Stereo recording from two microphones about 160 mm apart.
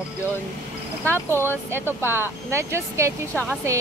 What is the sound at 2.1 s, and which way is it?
Speech, 15° right (ahead or behind).